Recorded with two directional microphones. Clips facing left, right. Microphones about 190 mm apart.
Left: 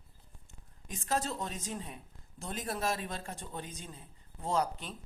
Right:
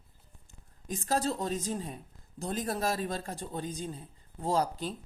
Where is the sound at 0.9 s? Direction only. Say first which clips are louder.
Right 4 dB; 35° right (ahead or behind).